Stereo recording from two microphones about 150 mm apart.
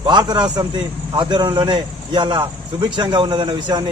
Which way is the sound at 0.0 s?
30° right (ahead or behind).